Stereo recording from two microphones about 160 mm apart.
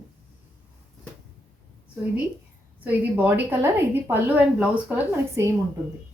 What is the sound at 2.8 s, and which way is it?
Speech, 10° right (ahead or behind).